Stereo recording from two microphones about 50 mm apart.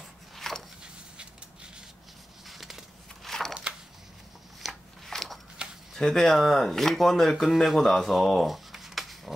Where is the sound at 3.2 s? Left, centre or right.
Centre.